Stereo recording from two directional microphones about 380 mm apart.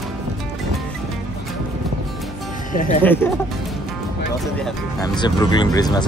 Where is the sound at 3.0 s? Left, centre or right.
Centre.